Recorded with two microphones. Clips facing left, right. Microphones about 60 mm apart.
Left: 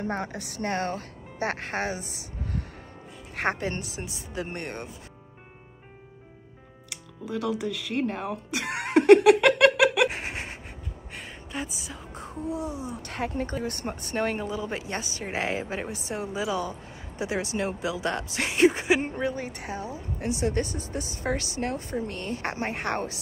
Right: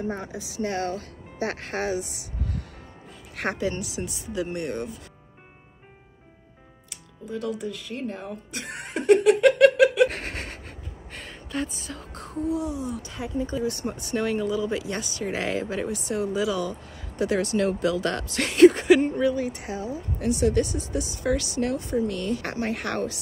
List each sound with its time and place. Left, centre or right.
0.0 s speech: left
6.9 s speech: left
10.0 s a sound: centre
11.1 s music: centre
12.2 s speech: left
13.0 s speech: left
17.2 s speech: centre
19.3 s speech: left